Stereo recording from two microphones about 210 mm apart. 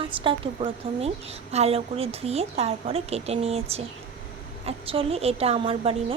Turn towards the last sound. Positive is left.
turn(degrees=-25)  # may be behind; listen again after turning